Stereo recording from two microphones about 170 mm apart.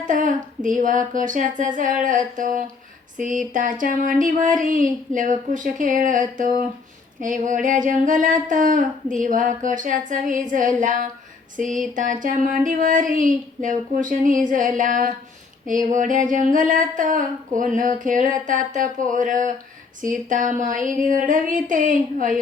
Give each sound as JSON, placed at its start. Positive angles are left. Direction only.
{"t": 0.1, "sound": "speech", "side_deg": -50}